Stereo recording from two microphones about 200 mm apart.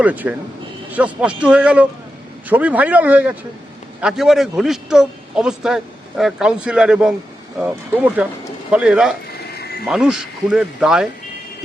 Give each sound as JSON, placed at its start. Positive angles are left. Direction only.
{"t": 0.0, "sound": "a man's voice", "side_deg": -5}
{"t": 9.6, "sound": "a sound", "side_deg": 55}
{"t": 9.8, "sound": "a man's voice", "side_deg": -5}